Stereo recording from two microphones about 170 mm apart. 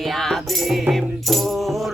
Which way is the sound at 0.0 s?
Centre (ahead or behind).